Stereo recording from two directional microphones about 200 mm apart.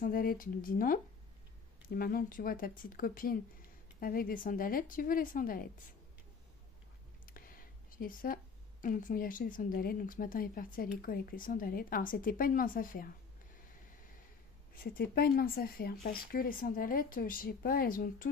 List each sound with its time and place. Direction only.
0.0 s a woman's voice: 45° left (ahead or behind)
7.2 s a sound: 45° left (ahead or behind)
8.8 s a woman's voice: 40° left (ahead or behind)
14.7 s a woman's voice: 50° left (ahead or behind)